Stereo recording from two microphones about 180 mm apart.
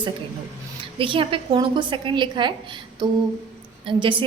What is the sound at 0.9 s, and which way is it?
A woman's voice, 30° right (ahead or behind).